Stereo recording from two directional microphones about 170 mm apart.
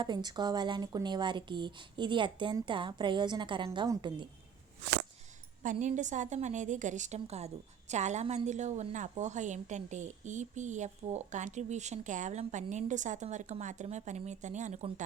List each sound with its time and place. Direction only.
0.0 s speech: 25° right (ahead or behind)
5.8 s a woman's voice: 45° right (ahead or behind)